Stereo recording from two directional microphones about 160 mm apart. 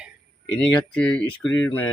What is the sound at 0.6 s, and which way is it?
Speech, 5° left (ahead or behind).